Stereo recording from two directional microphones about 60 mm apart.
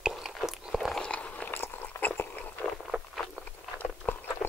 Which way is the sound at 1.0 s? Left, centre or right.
Centre.